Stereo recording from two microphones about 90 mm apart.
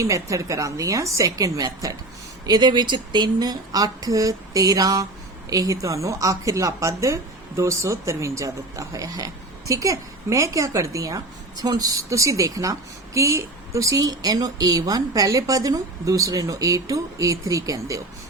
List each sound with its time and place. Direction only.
0.0 s a woman's voice: 35° right (ahead or behind)
2.5 s a woman's voice: 55° right (ahead or behind)